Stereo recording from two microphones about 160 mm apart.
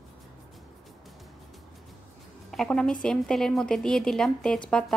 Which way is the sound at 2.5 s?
5° left (ahead or behind).